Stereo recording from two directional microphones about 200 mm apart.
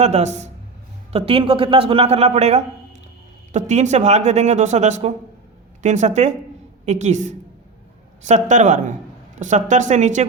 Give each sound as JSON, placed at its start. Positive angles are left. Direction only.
{"t": 0.0, "sound": "a man's voice", "side_deg": -35}